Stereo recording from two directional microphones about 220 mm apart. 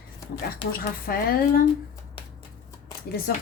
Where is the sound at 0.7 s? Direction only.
40° left (ahead or behind).